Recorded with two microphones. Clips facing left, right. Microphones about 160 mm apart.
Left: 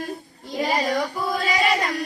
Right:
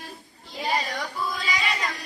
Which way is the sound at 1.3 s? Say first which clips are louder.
Left 7 dB; 50° left (ahead or behind).